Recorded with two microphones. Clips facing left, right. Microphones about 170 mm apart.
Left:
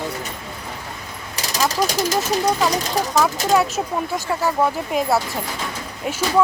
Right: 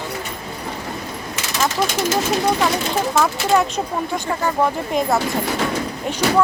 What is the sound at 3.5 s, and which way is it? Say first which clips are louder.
Speech: right 1 dB; 5° left (ahead or behind).